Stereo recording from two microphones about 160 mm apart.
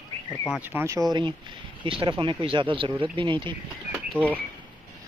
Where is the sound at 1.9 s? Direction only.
35° right (ahead or behind).